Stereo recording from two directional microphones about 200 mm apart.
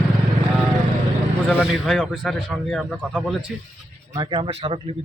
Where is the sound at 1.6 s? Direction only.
Centre (ahead or behind).